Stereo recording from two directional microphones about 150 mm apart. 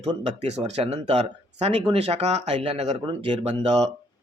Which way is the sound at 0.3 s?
45° right (ahead or behind).